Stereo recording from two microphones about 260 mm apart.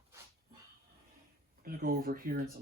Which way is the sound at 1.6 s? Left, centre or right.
Right.